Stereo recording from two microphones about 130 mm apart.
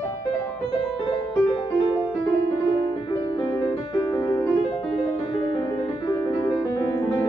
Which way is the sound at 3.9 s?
30° left (ahead or behind).